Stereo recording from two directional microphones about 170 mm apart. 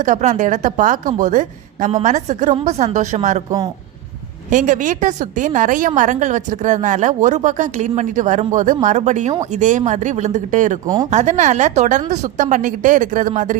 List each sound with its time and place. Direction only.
0.0 s a woman's voice: 45° right (ahead or behind)
4.4 s a woman's voice: 50° right (ahead or behind)
10.8 s speech: 25° right (ahead or behind)
11.1 s a woman's voice: 45° right (ahead or behind)